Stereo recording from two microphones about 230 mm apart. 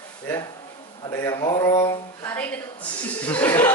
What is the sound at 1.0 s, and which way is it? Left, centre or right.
Speech, centre.